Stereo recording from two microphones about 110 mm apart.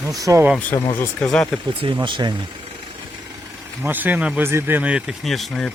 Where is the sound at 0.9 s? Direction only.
20° left (ahead or behind).